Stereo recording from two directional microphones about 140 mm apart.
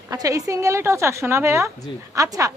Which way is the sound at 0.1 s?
25° right (ahead or behind).